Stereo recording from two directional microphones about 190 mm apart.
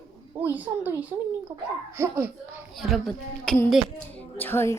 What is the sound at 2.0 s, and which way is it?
Speech, 10° right (ahead or behind).